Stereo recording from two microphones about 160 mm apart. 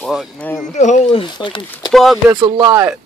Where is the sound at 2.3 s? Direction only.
25° right (ahead or behind).